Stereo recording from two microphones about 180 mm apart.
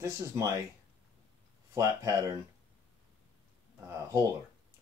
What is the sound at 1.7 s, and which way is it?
Speech, 20° right (ahead or behind).